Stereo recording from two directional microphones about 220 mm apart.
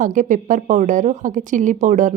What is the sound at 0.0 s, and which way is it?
A woman's voice, 35° right (ahead or behind).